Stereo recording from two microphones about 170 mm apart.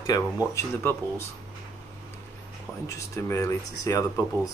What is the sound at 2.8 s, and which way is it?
Speech, 20° left (ahead or behind).